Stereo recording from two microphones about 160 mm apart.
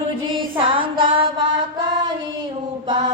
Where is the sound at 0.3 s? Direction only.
30° right (ahead or behind).